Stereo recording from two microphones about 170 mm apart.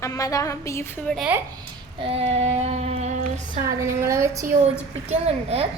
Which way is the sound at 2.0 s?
35° right (ahead or behind).